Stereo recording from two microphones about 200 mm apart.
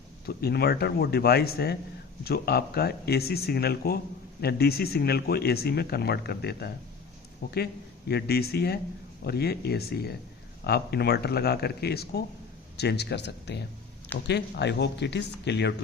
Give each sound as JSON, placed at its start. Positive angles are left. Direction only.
{"t": 0.3, "sound": "speech", "side_deg": 50}